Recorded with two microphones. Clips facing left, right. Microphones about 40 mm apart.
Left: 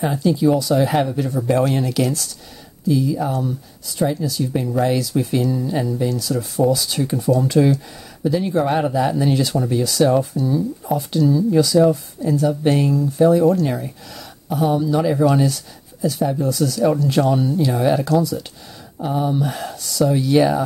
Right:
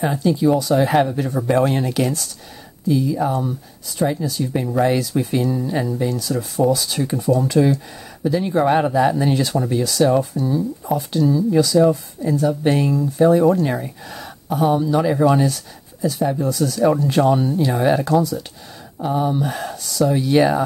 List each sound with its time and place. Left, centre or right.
0.0 s speech: centre